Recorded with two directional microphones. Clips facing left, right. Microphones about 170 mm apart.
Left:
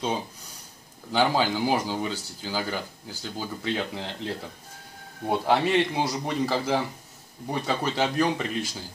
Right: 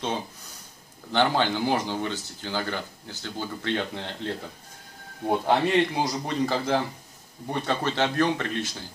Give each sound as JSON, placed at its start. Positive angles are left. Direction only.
{"t": 1.1, "sound": "a man's voice", "side_deg": 10}